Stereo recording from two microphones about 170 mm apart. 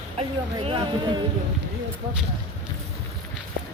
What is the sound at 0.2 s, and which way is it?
Speech, 30° right (ahead or behind).